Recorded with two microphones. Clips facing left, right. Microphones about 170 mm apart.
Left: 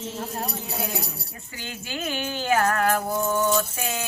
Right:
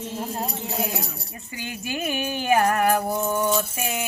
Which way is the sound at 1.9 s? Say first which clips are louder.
Right 2 dB; 15° right (ahead or behind).